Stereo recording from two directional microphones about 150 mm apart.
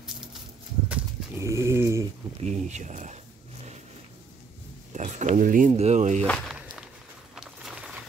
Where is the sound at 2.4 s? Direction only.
50° right (ahead or behind).